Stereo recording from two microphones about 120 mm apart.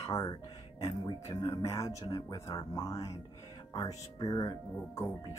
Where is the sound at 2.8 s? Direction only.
25° left (ahead or behind).